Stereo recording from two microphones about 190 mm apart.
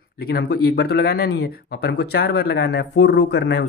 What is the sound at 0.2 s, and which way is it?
Speech, 55° left (ahead or behind).